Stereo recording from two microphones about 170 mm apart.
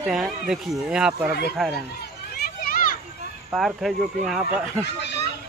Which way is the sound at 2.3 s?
60° left (ahead or behind).